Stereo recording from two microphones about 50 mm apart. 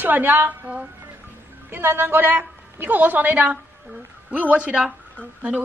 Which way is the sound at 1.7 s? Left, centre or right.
Right.